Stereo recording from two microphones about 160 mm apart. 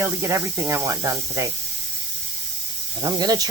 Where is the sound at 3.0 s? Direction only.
25° right (ahead or behind).